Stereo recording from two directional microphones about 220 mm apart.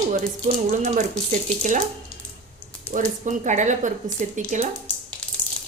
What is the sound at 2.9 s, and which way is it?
Speech, 35° right (ahead or behind).